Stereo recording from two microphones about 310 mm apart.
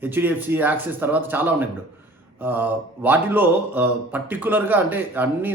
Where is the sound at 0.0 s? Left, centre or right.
Centre.